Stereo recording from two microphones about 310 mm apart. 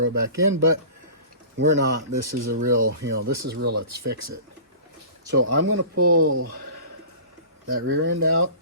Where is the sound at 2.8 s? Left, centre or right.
Right.